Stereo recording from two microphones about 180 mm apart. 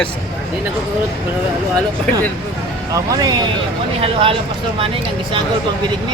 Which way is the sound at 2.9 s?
20° right (ahead or behind).